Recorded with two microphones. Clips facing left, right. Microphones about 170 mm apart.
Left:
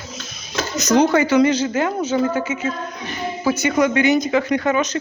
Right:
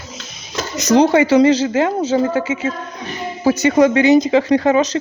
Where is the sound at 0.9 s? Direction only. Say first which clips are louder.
Right 4 dB; 30° right (ahead or behind).